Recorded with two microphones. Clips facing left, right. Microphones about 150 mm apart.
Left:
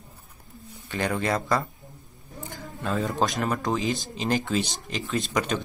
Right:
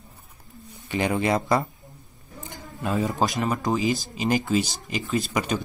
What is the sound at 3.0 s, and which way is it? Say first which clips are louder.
Speech: right 1 dB; centre (ahead or behind).